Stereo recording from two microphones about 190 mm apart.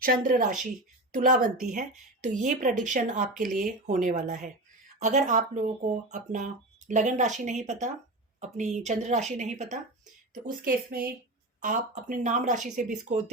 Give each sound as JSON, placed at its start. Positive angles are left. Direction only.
{"t": 0.0, "sound": "speech", "side_deg": -50}
{"t": 10.4, "sound": "speech", "side_deg": -50}